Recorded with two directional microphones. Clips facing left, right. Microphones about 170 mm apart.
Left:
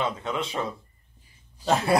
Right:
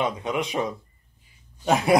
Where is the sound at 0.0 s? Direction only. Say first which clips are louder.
Right 3 dB; 15° right (ahead or behind).